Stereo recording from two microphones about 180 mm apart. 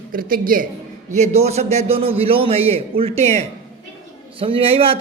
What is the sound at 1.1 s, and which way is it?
A man's voice, 40° right (ahead or behind).